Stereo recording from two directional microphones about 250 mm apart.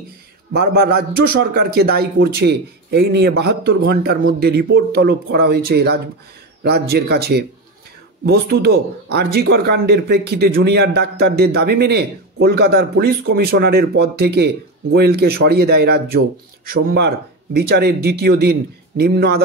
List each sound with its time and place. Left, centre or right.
0.5 s a man's voice: right